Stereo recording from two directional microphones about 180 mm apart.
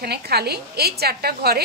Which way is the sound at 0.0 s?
60° right (ahead or behind).